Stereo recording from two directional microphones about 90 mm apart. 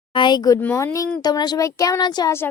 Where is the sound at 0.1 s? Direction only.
60° left (ahead or behind).